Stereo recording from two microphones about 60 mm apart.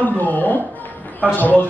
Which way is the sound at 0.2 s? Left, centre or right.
Left.